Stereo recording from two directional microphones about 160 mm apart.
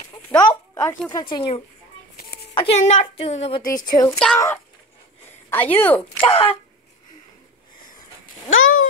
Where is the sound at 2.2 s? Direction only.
75° left (ahead or behind).